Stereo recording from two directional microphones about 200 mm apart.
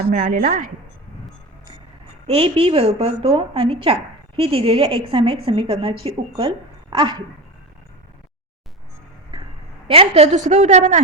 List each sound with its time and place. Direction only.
0.1 s a woman's voice: 40° right (ahead or behind)
2.2 s a woman's voice: 30° right (ahead or behind)
9.3 s a sound: 20° right (ahead or behind)
9.8 s a woman's voice: 30° right (ahead or behind)